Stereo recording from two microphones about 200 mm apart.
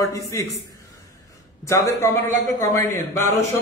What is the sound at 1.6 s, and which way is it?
A man's voice, 15° left (ahead or behind).